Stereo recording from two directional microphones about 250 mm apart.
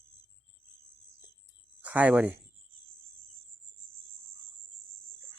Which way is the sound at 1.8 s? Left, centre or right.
Centre.